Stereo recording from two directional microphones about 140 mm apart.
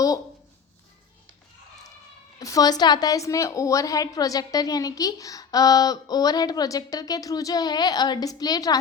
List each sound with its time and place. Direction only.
2.4 s a woman's voice: 25° left (ahead or behind)